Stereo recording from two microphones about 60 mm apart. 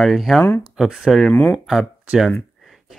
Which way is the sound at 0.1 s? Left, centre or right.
Centre.